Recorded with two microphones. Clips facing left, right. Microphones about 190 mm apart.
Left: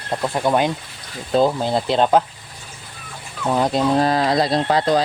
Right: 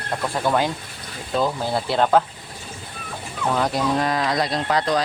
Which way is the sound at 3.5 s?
25° left (ahead or behind).